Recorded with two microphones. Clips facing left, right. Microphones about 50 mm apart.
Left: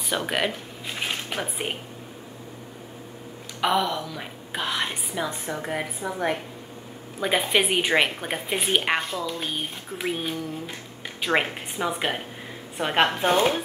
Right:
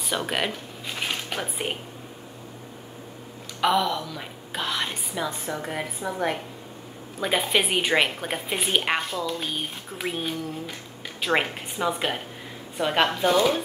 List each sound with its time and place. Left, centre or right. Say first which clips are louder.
0.1 s speech: left 1 dB; centre
3.6 s a woman's voice: right 1 dB; centre
13.2 s speech: even; left